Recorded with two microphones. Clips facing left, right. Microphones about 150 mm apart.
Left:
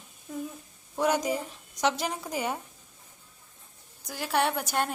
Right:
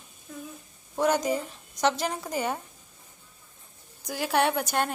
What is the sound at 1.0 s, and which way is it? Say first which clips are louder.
A woman's voice: right 2 dB; 10° left (ahead or behind).